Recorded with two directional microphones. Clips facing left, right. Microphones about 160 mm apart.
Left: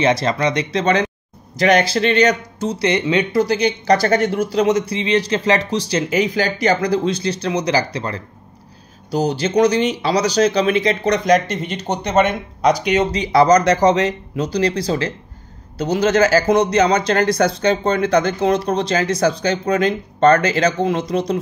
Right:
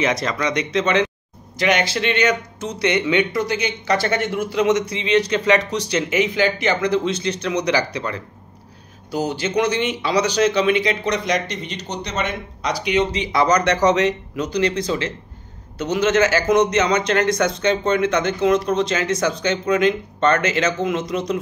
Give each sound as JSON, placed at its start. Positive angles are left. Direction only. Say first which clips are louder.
{"t": 0.0, "sound": "speech", "louder": "left 4 dB", "side_deg": 30}
{"t": 11.3, "sound": "speech", "louder": "left 6 dB", "side_deg": 50}